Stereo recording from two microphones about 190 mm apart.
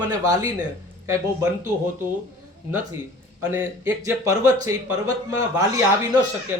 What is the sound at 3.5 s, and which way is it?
Speech, 15° right (ahead or behind).